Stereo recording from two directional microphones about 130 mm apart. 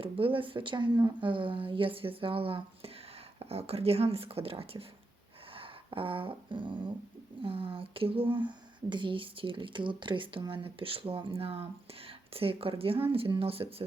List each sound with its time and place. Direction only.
0.0 s speech: 45° right (ahead or behind)
5.5 s dog: 45° right (ahead or behind)
7.4 s speech: 45° right (ahead or behind)